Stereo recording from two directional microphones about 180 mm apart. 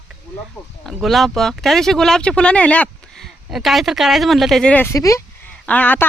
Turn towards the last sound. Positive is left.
turn(degrees=10)  # may be behind; listen again after turning